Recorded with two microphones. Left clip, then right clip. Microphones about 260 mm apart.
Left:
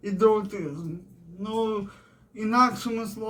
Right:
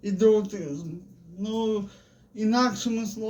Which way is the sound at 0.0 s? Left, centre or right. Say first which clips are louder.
Right 1 dB; centre.